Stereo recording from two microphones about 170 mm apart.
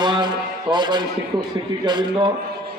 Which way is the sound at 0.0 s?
25° right (ahead or behind).